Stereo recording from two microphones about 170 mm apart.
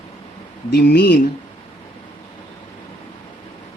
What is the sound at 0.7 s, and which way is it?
Speech, 70° left (ahead or behind).